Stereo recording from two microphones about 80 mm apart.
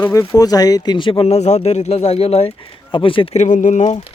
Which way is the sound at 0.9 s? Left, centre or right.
Left.